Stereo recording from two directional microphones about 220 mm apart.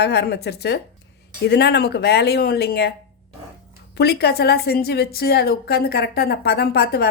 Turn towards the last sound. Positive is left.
turn(degrees=45)  # may be behind; listen again after turning